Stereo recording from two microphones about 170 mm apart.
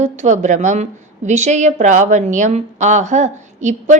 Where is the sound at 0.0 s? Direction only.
45° right (ahead or behind).